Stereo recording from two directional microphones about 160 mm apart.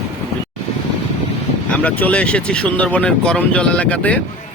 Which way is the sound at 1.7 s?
10° left (ahead or behind).